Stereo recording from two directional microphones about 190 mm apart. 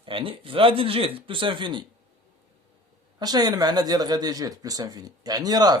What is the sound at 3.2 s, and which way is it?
Speech, 20° right (ahead or behind).